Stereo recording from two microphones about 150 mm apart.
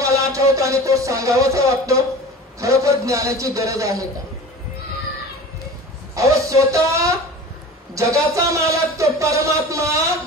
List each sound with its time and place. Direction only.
0.0 s music: 20° right (ahead or behind)
2.6 s a man's voice: 20° right (ahead or behind)
6.1 s a man's voice: 20° right (ahead or behind)